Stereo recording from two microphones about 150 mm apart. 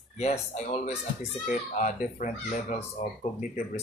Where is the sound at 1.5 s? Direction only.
60° left (ahead or behind).